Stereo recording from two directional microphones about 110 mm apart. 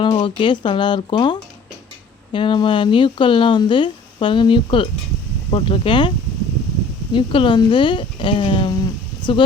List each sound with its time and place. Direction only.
0.0 s speech: 50° left (ahead or behind)